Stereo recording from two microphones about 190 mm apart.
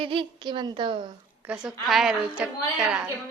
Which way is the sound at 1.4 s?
5° right (ahead or behind).